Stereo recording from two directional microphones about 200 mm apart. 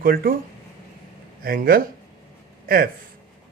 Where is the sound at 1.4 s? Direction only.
45° right (ahead or behind).